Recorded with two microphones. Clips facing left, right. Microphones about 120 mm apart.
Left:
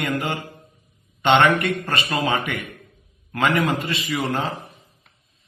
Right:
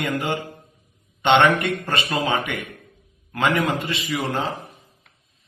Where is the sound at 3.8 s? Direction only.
15° right (ahead or behind).